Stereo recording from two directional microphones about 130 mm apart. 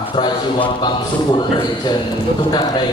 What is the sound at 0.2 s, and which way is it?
A man's voice, 40° left (ahead or behind).